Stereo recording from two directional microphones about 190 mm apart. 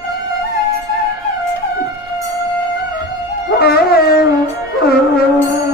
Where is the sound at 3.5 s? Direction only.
55° left (ahead or behind).